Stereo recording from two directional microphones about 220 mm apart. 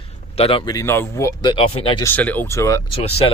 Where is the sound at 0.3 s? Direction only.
25° left (ahead or behind).